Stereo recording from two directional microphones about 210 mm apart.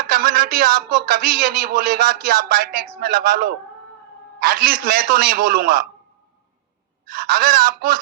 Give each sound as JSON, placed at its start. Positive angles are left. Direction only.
{"t": 0.1, "sound": "speech", "side_deg": -45}
{"t": 7.1, "sound": "speech", "side_deg": -45}